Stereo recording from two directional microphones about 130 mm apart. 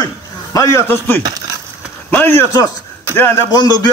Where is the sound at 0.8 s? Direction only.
15° left (ahead or behind).